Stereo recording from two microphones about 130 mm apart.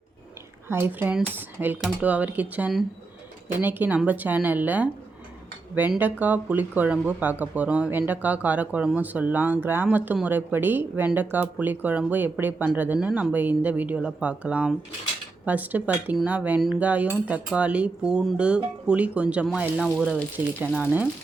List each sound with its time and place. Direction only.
0.7 s speech: 15° right (ahead or behind)
6.0 s speech: 15° right (ahead or behind)